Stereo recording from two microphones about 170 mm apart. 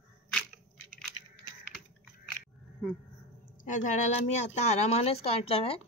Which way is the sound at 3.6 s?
50° left (ahead or behind).